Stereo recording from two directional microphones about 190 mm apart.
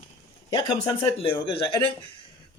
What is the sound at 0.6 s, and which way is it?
Speech, 30° left (ahead or behind).